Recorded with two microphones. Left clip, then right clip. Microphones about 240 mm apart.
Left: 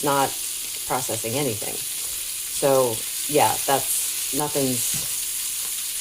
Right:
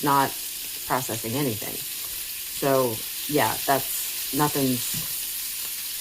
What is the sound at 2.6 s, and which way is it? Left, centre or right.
Frying, right.